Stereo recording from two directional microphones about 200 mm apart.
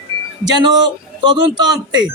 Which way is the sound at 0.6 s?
20° right (ahead or behind).